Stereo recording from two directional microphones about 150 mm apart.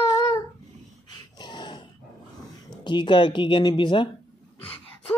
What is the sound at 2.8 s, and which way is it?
Speech, 30° left (ahead or behind).